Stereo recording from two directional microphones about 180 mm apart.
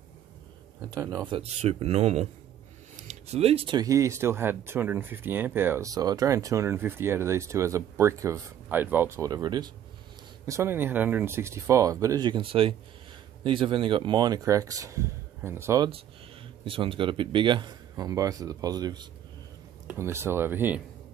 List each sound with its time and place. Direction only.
0.8 s speech: 20° right (ahead or behind)
16.6 s speech: 30° right (ahead or behind); by 20.8 s 10° right (ahead or behind)